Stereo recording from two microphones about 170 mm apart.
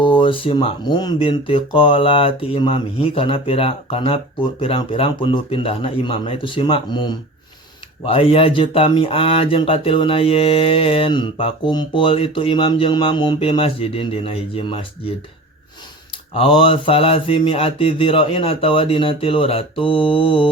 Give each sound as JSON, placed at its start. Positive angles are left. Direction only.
{"t": 0.0, "sound": "speech", "side_deg": 30}
{"t": 16.3, "sound": "speech", "side_deg": 30}